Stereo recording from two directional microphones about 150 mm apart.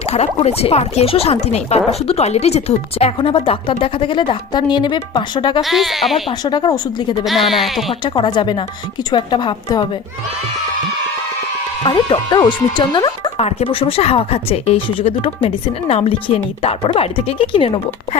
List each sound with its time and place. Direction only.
0.1 s speech: 45° left (ahead or behind); by 5.6 s 30° left (ahead or behind)
5.6 s speech: centre (ahead or behind)
6.2 s speech: 30° left (ahead or behind)
7.3 s speech: centre (ahead or behind)
8.0 s speech: 30° left (ahead or behind)
11.8 s speech: 35° left (ahead or behind)
13.3 s speech: 45° left (ahead or behind)